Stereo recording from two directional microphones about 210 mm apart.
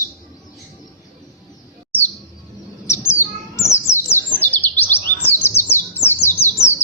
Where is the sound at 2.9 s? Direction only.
10° left (ahead or behind).